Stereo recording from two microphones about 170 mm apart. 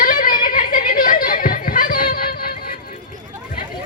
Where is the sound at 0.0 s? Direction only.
55° left (ahead or behind).